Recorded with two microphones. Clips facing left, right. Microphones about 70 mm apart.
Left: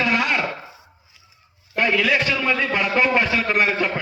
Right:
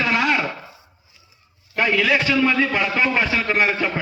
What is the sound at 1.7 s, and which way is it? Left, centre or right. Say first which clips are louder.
A man's voice: right 1 dB; centre.